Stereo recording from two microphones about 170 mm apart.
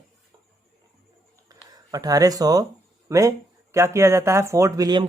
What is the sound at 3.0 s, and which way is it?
Speech, 20° right (ahead or behind).